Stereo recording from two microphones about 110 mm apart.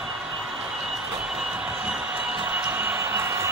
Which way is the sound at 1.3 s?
5° right (ahead or behind).